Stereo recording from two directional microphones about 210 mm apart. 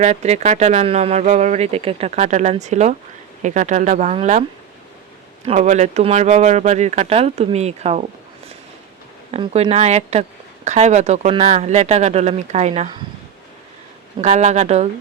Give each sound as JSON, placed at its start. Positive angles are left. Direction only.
{"t": 0.0, "sound": "speech", "side_deg": -30}
{"t": 5.5, "sound": "speech", "side_deg": -35}
{"t": 9.3, "sound": "speech", "side_deg": -30}
{"t": 14.2, "sound": "speech", "side_deg": -35}